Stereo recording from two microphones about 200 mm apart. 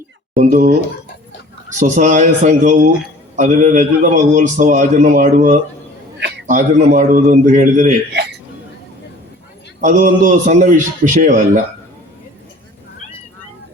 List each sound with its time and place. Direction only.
0.3 s a man's voice: 40° right (ahead or behind)
1.8 s a man's voice: 40° right (ahead or behind)
9.8 s a man's voice: 40° right (ahead or behind)